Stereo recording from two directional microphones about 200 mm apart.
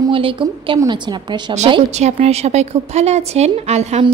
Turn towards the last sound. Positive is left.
turn(degrees=-35)  # may be behind; listen again after turning